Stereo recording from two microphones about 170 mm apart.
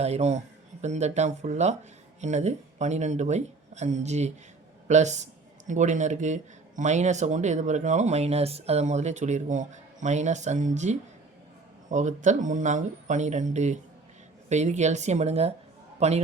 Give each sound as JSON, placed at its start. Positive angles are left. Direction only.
{"t": 0.0, "sound": "a man's voice", "side_deg": -40}